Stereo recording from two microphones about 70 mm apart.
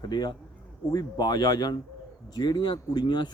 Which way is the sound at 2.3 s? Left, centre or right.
Left.